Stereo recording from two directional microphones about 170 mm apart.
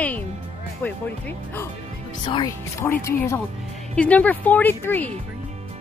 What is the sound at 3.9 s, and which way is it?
Speech, 10° left (ahead or behind).